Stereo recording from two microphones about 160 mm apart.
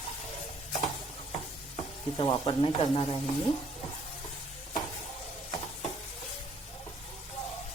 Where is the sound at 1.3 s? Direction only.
35° left (ahead or behind).